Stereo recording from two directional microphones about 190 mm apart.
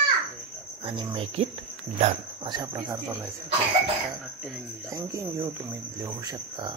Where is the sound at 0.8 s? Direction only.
30° right (ahead or behind).